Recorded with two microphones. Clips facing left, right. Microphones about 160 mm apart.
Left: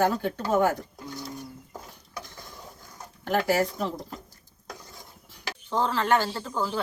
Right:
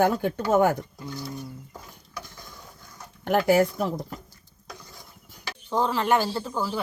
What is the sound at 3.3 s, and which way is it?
Speech, 55° right (ahead or behind).